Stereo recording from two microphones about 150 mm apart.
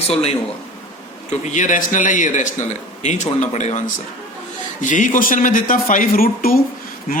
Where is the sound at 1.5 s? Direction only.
55° left (ahead or behind).